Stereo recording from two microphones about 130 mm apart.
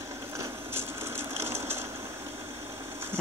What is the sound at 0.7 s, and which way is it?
Sewing machine, 20° right (ahead or behind).